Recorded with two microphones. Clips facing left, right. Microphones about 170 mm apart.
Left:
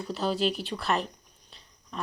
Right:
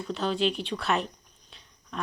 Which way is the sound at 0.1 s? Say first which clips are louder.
Right 1 dB; 5° left (ahead or behind).